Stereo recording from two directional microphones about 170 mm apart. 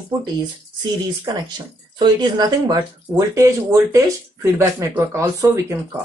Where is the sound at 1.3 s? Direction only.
25° right (ahead or behind).